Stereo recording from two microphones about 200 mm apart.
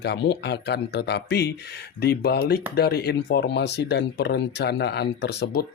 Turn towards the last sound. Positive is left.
turn(degrees=55)  # may be behind; listen again after turning